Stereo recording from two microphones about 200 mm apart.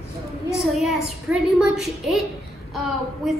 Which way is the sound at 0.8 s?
Centre (ahead or behind).